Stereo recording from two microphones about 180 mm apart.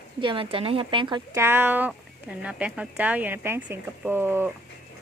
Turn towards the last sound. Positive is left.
turn(degrees=-10)  # may be behind; listen again after turning